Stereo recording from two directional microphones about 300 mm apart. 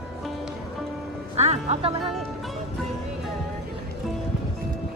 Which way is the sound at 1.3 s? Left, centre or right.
Right.